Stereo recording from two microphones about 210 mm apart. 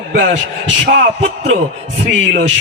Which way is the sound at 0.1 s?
60° right (ahead or behind).